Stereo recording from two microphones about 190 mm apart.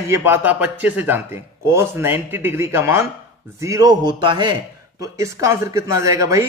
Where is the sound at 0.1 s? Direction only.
10° right (ahead or behind).